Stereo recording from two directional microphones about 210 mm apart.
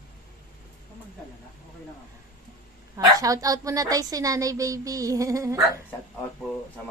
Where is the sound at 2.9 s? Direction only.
15° right (ahead or behind).